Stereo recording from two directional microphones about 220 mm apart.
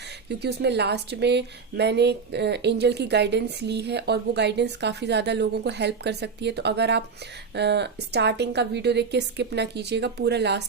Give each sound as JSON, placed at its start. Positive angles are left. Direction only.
{"t": 0.3, "sound": "speech", "side_deg": -50}